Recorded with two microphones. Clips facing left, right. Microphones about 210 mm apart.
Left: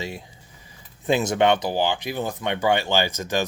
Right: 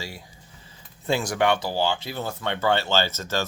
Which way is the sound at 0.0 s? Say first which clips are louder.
Left 5 dB; 20° left (ahead or behind).